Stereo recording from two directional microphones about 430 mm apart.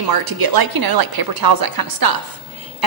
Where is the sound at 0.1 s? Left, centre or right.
Right.